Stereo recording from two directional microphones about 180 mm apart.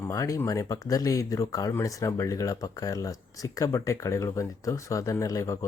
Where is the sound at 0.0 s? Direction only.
20° left (ahead or behind).